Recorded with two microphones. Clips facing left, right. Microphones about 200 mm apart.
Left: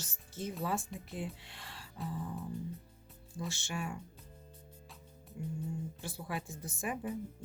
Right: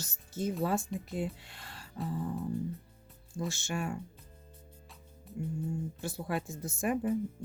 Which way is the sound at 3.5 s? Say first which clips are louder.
Right 4 dB; 45° right (ahead or behind).